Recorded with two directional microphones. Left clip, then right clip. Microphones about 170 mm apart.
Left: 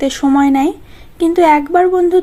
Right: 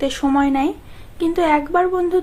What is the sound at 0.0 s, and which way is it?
A woman's voice, 30° left (ahead or behind).